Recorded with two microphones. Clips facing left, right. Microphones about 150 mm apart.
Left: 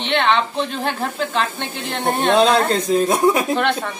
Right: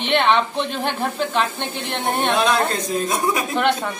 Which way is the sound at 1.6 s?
Centre (ahead or behind).